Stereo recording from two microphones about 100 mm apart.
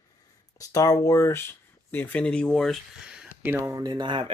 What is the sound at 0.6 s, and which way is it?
Speech, 35° left (ahead or behind).